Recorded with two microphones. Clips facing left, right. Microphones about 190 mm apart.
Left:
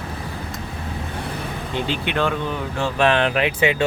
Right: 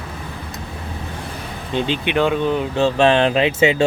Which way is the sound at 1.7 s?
20° right (ahead or behind).